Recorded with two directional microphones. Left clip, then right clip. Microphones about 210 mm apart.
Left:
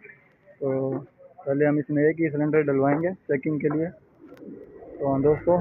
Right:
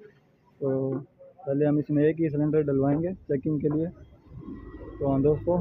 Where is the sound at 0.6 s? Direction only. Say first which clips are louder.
Left 2 dB; 5° right (ahead or behind).